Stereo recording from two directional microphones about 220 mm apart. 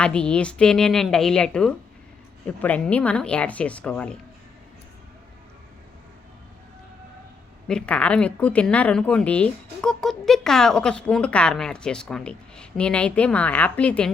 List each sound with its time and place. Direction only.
0.0 s a woman's voice: 5° left (ahead or behind)
7.7 s a woman's voice: 5° left (ahead or behind)